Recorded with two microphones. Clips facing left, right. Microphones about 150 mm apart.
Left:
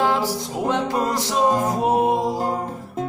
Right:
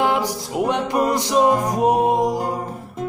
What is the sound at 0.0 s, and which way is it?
Music, 15° right (ahead or behind).